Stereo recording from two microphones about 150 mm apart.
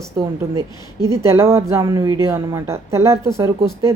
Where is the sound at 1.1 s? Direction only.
20° right (ahead or behind).